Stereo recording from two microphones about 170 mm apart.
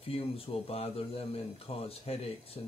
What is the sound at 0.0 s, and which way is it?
Speech, 35° left (ahead or behind).